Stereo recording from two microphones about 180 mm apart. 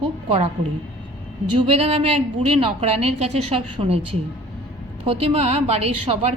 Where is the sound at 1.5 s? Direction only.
35° right (ahead or behind).